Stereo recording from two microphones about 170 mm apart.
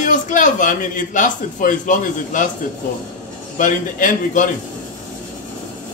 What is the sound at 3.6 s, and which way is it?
Speech, 50° left (ahead or behind).